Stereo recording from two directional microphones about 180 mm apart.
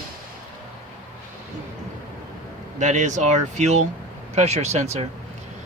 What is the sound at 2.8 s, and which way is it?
Speech, 40° right (ahead or behind).